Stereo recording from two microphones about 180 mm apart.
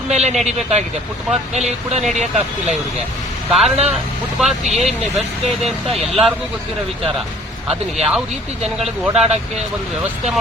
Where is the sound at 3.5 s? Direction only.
Centre (ahead or behind).